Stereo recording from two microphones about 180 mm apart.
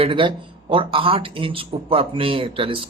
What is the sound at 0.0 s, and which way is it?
Speech, 30° right (ahead or behind).